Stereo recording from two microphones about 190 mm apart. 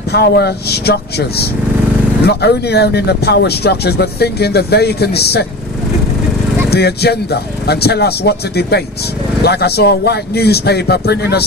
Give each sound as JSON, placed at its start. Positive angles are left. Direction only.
{"t": 0.1, "sound": "speech", "side_deg": 60}
{"t": 6.7, "sound": "speech", "side_deg": 60}